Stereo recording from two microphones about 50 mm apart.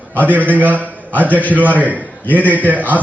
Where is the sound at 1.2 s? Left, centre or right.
Left.